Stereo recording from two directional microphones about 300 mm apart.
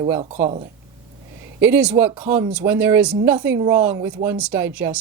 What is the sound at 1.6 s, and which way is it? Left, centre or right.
Speech, centre.